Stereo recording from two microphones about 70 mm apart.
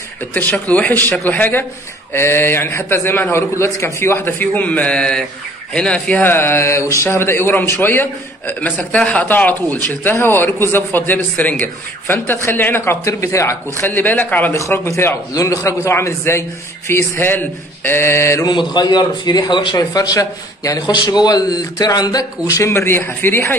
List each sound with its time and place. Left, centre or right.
0.2 s a man's voice: left
6.2 s speech: left
10.1 s a man's voice: left
13.0 s speech: left
13.7 s a man's voice: left
14.5 s speech: left
15.3 s speech: left
18.4 s a man's voice: left
21.0 s a man's voice: left
22.5 s speech: left